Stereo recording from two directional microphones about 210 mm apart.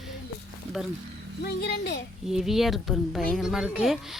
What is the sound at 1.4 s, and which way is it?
Speech, 50° left (ahead or behind).